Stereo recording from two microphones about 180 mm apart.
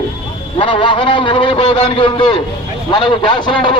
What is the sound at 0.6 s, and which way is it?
Speech, 25° left (ahead or behind).